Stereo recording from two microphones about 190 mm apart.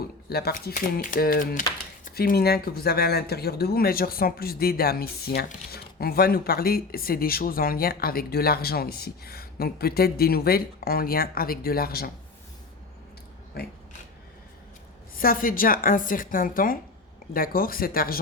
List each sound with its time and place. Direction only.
0.3 s speech: 55° left (ahead or behind)
13.6 s speech: 55° left (ahead or behind)
15.2 s speech: 50° left (ahead or behind)